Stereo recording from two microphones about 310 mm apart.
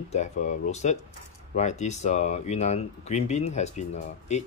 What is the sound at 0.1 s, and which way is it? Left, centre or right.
Speech, left.